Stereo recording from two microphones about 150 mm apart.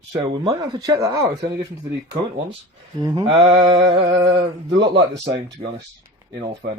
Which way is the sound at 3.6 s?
30° right (ahead or behind).